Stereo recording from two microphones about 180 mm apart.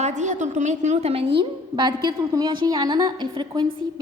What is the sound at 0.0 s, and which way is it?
A woman's voice, 40° right (ahead or behind).